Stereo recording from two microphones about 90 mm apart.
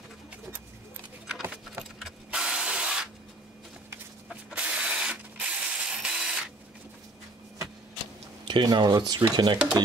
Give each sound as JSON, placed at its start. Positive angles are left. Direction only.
{"t": 2.0, "sound": "a sound", "side_deg": -5}
{"t": 4.3, "sound": "mechanisms", "side_deg": -10}
{"t": 8.5, "sound": "speech", "side_deg": -60}